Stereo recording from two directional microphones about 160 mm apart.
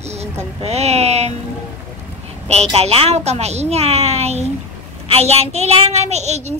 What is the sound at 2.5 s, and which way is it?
A child's voice, 40° right (ahead or behind).